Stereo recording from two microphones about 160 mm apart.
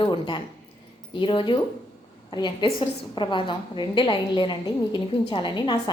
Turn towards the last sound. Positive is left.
turn(degrees=30)  # may be behind; listen again after turning